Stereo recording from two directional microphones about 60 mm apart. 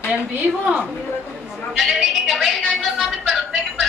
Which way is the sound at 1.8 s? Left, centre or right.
Centre.